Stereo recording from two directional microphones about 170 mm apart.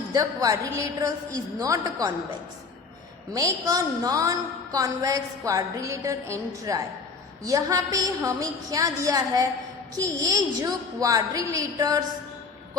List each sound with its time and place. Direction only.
0.1 s a woman's voice: 20° right (ahead or behind)
3.3 s a woman's voice: 20° right (ahead or behind)